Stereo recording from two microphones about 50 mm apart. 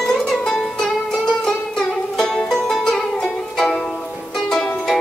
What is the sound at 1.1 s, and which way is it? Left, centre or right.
Music, centre.